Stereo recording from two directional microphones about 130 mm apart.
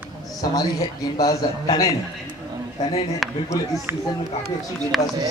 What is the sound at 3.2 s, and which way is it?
Speech, centre (ahead or behind).